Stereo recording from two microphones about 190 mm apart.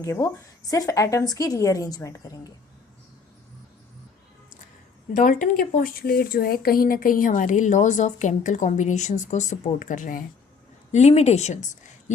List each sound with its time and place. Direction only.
0.0 s a woman's voice: 15° left (ahead or behind)
5.1 s a woman's voice: 45° left (ahead or behind)